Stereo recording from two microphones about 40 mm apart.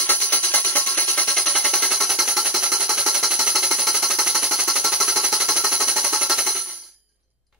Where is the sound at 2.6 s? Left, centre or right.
Centre.